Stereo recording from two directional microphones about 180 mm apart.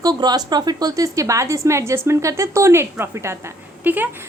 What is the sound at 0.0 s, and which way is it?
A woman's voice, 20° right (ahead or behind).